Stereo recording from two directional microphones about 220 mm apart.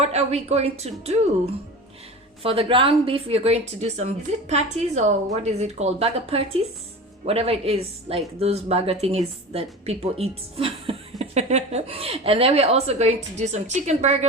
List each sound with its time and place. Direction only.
0.0 s a woman's voice: 30° right (ahead or behind)
2.4 s a woman's voice: 25° right (ahead or behind)